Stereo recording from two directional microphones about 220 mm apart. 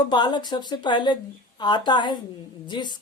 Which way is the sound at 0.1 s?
20° left (ahead or behind).